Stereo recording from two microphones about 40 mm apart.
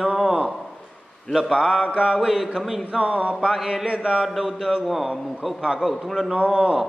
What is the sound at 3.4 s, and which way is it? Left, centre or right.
Mantra, centre.